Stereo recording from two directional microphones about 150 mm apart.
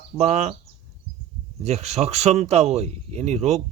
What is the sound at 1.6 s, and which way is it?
Speech, 45° right (ahead or behind).